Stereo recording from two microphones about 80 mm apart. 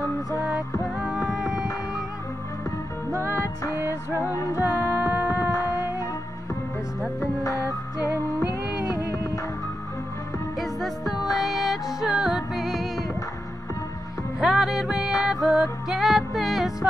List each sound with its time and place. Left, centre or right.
0.7 s music: centre
3.1 s music: right
4.3 s music: left
4.6 s music: centre
7.4 s music: left
10.6 s music: centre
14.4 s music: centre